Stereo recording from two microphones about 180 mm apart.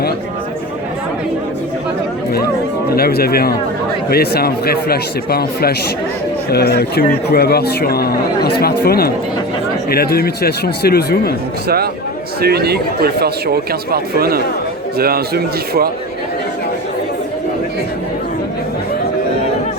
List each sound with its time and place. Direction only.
2.9 s speech: 60° left (ahead or behind)
12.4 s speech: 60° right (ahead or behind)